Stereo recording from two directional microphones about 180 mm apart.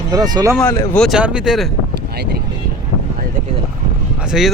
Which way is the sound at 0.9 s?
Centre (ahead or behind).